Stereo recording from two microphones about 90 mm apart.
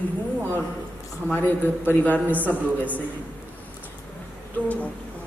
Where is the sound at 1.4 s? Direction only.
20° left (ahead or behind).